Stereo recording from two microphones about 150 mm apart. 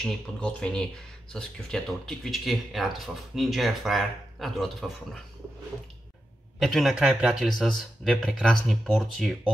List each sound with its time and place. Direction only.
0.0 s speech: 5° left (ahead or behind)
6.6 s speech: centre (ahead or behind)